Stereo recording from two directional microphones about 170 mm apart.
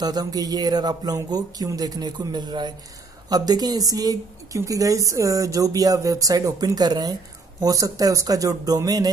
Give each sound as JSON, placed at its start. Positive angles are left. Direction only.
{"t": 0.0, "sound": "a woman's voice", "side_deg": -25}